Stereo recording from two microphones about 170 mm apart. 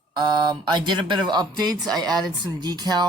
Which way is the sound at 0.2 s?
25° right (ahead or behind).